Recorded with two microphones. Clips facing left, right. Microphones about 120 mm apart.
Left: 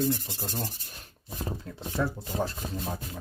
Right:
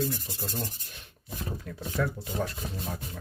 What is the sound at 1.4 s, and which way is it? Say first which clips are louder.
Speech: left 1 dB; 30° left (ahead or behind).